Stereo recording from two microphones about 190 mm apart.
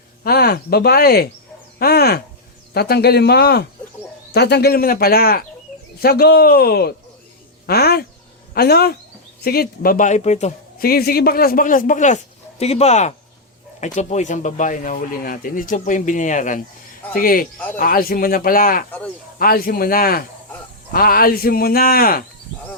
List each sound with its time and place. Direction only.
0.3 s a man's voice: 55° left (ahead or behind); by 10.5 s 35° left (ahead or behind)
10.8 s a man's voice: 55° left (ahead or behind)